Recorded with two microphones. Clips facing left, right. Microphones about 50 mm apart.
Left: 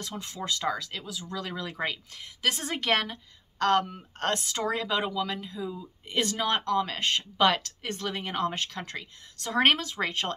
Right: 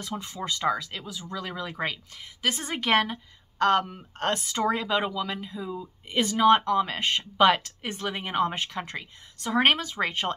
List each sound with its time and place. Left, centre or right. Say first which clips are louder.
0.0 s a woman's voice: right 2 dB; centre